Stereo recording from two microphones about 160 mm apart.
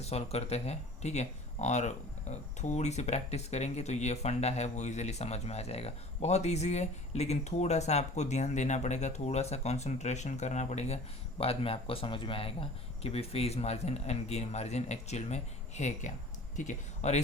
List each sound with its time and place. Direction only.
0.0 s speech: 40° left (ahead or behind)